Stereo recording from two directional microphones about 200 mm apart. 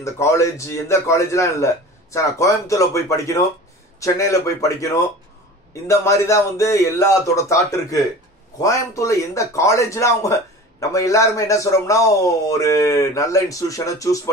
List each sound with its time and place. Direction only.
0.0 s a man's voice: 15° left (ahead or behind)